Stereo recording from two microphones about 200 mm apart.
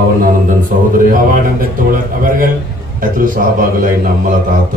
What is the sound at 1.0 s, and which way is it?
A man's voice, 45° right (ahead or behind).